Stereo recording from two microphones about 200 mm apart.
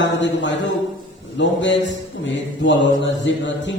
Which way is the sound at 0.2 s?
65° left (ahead or behind).